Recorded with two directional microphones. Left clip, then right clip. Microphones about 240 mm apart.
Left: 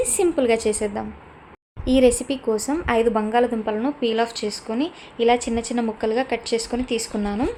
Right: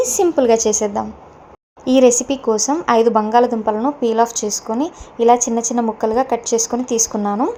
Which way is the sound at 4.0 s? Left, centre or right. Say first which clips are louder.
Right 6 dB; left.